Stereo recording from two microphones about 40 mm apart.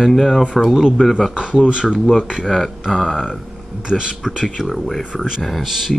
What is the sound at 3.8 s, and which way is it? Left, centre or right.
Speech, centre.